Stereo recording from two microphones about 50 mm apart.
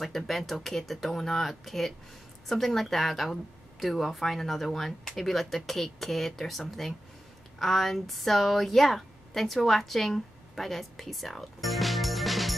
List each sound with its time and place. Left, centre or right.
0.0 s a woman's voice: centre